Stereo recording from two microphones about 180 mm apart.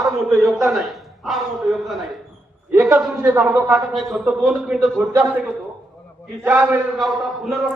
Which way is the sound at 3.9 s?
Centre (ahead or behind).